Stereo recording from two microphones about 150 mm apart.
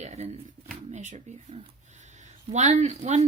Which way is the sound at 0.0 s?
45° right (ahead or behind).